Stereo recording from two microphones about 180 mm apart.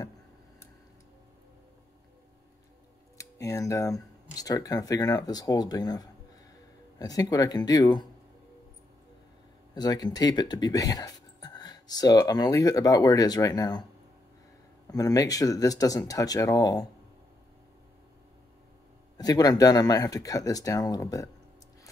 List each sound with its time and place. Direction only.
3.2 s speech: 20° left (ahead or behind)
9.8 s speech: 20° left (ahead or behind)
14.9 s speech: 20° left (ahead or behind)
19.1 s speech: 20° left (ahead or behind)